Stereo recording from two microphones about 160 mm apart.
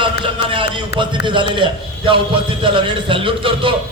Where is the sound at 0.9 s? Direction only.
30° right (ahead or behind).